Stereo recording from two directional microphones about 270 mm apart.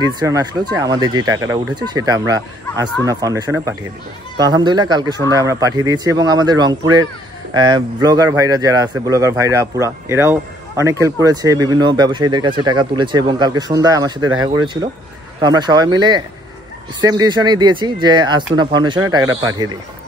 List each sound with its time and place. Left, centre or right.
0.0 s a man's voice: centre